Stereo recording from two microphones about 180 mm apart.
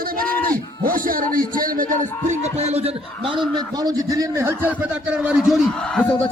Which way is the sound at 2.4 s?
35° right (ahead or behind).